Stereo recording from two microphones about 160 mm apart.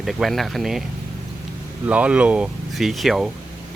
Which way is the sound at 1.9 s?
10° right (ahead or behind).